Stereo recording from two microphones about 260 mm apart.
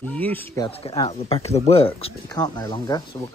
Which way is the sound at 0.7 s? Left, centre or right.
Left.